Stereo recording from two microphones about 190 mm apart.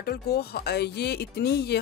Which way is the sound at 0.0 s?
55° left (ahead or behind).